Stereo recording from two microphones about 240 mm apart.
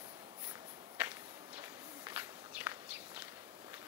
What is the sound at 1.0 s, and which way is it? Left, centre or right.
Walk, centre.